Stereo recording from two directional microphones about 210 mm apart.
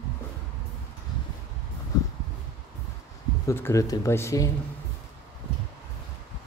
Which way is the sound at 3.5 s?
15° left (ahead or behind).